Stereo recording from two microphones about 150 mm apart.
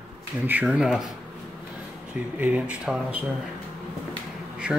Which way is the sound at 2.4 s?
10° right (ahead or behind).